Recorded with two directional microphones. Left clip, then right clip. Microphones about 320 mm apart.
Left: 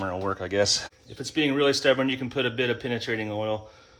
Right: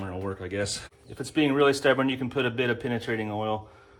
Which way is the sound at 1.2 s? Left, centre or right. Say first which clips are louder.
Right 1 dB; centre.